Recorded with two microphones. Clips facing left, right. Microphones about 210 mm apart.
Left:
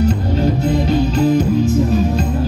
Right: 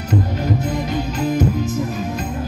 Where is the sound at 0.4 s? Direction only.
30° left (ahead or behind).